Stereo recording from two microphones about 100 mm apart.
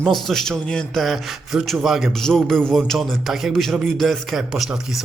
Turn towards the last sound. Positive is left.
turn(degrees=0)  # may be behind; listen again after turning